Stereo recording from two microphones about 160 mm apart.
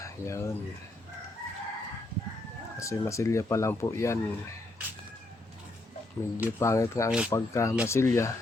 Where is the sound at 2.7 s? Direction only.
20° left (ahead or behind).